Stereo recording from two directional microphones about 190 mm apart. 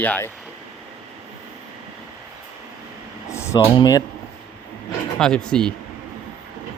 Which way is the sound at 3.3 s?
15° left (ahead or behind).